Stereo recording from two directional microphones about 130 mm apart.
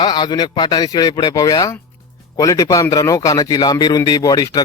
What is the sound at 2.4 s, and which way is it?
Music, 25° left (ahead or behind).